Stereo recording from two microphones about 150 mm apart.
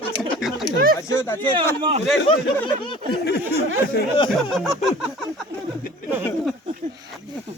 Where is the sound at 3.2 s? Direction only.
90° left.